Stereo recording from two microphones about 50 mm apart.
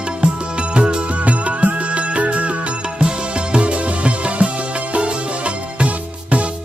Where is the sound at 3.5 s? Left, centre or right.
Right.